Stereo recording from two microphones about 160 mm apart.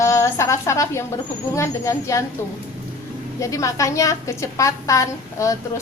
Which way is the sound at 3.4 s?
20° left (ahead or behind).